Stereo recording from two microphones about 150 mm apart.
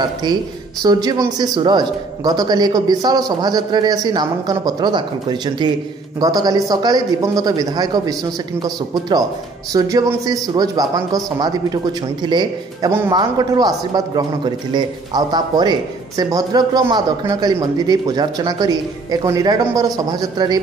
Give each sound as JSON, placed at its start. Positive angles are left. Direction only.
{"t": 0.0, "sound": "a man's voice", "side_deg": -30}